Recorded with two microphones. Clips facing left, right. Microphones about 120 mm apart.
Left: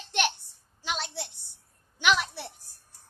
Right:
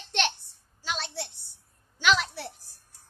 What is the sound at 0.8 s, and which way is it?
A woman's voice, 15° left (ahead or behind).